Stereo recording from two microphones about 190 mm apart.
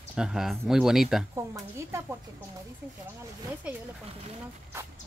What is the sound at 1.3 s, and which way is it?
Speech, 15° right (ahead or behind).